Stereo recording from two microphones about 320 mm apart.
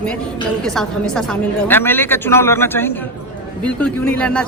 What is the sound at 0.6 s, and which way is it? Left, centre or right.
A man's voice, centre.